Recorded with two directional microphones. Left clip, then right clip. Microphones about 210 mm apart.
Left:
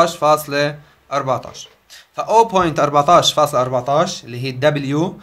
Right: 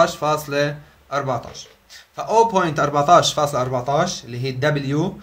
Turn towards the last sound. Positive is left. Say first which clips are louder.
# left 4 dB
turn(degrees=25)  # may be behind; listen again after turning